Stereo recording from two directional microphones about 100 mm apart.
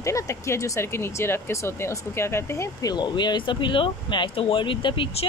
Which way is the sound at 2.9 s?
45° left (ahead or behind).